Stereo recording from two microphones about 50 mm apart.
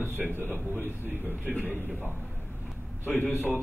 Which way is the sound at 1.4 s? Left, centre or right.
Right.